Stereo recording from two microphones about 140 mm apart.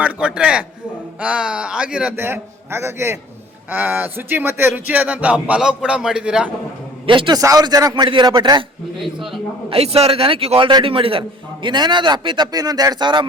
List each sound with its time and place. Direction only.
0.0 s speech: 10° right (ahead or behind)
7.1 s a man's voice: 35° right (ahead or behind)
9.6 s a man's voice: 45° right (ahead or behind)